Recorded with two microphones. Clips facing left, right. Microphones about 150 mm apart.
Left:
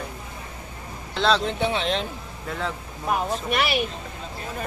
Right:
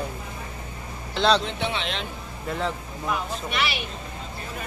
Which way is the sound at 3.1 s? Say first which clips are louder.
Left 4 dB; 45° left (ahead or behind).